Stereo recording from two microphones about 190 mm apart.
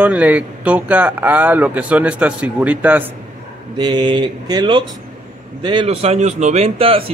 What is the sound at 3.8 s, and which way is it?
A man's voice, 25° right (ahead or behind).